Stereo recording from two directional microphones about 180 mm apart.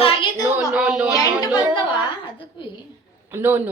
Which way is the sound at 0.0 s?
30° left (ahead or behind).